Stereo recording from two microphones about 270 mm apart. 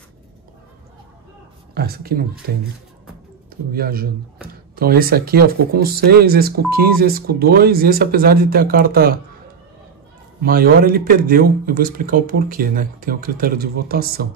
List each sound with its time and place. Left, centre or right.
1.7 s speech: right
3.7 s speech: right
10.4 s speech: right